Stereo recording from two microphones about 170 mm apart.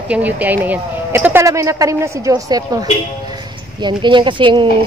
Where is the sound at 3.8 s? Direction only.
25° right (ahead or behind).